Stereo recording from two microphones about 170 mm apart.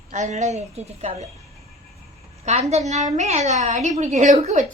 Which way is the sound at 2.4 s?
40° right (ahead or behind).